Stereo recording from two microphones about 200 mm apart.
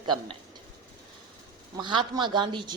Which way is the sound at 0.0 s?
25° right (ahead or behind).